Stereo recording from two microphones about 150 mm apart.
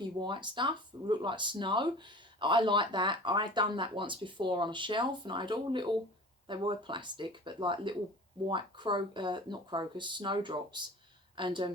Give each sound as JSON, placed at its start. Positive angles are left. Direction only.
{"t": 0.2, "sound": "speech", "side_deg": -30}